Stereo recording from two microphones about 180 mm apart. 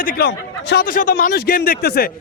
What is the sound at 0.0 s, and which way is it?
A man's voice, 55° left (ahead or behind).